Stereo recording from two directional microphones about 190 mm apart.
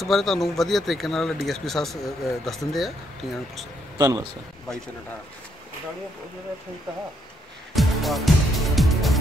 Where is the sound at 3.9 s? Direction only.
15° right (ahead or behind).